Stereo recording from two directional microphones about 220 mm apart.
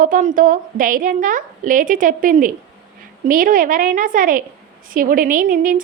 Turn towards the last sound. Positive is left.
turn(degrees=-40)  # may be behind; listen again after turning